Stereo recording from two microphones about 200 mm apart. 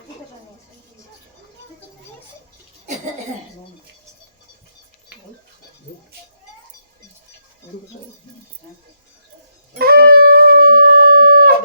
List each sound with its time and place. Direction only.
9.7 s shofar: 50° right (ahead or behind)